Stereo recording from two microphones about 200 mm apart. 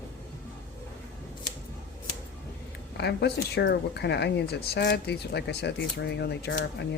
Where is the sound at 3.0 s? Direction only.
55° left (ahead or behind).